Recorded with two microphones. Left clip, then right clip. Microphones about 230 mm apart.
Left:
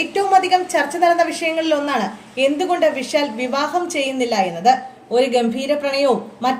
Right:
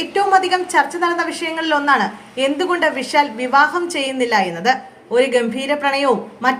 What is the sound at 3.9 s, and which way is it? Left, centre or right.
Speech, right.